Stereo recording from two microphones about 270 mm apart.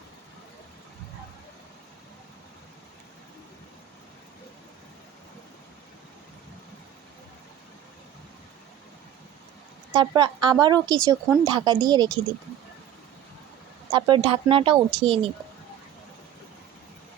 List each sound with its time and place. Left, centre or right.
10.0 s speech: centre
13.9 s speech: centre